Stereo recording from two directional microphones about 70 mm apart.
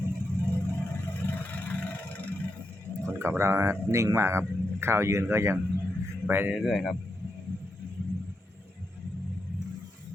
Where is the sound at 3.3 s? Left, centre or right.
Right.